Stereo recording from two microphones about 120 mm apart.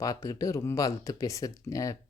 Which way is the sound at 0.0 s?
30° left (ahead or behind).